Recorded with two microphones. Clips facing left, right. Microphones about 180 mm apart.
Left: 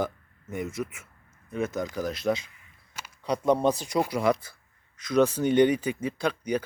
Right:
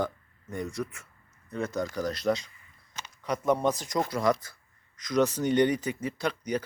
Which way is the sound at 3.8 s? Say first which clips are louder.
Left 2 dB; 10° left (ahead or behind).